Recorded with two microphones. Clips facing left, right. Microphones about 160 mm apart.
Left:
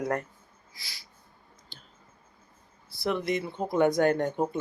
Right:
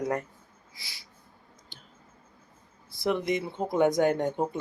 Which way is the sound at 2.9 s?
20° right (ahead or behind).